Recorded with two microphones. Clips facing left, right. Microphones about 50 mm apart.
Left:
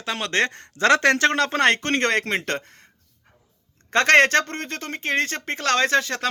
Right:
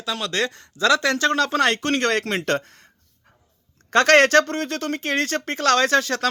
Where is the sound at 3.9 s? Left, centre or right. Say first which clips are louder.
Right 1 dB; left.